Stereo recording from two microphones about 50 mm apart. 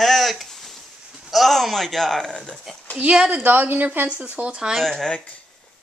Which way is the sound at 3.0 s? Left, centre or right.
Right.